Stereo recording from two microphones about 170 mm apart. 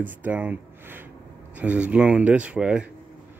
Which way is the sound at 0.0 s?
10° right (ahead or behind).